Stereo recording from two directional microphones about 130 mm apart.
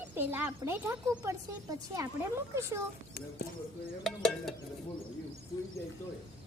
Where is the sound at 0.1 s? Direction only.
15° right (ahead or behind).